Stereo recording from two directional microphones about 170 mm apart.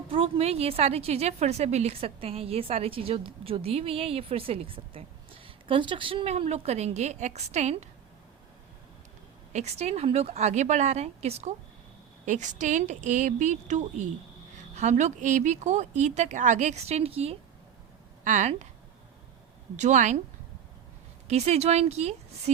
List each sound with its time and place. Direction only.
0.1 s a woman's voice: 35° right (ahead or behind)
9.5 s a woman's voice: 40° right (ahead or behind)
19.7 s speech: 45° right (ahead or behind)
21.2 s a woman's voice: 40° right (ahead or behind)